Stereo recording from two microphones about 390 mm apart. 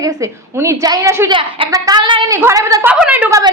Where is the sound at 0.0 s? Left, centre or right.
Centre.